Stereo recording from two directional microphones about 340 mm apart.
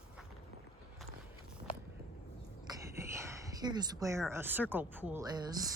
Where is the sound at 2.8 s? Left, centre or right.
Centre.